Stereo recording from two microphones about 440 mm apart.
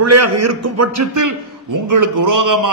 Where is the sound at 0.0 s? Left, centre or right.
Right.